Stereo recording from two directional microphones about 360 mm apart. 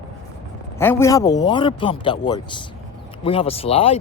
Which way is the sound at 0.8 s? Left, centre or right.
Centre.